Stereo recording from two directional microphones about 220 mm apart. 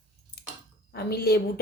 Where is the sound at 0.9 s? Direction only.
45° left (ahead or behind).